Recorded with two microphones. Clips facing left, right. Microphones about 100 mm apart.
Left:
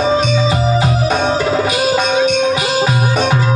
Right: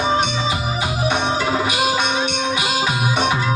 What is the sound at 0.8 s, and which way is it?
Music, 35° left (ahead or behind).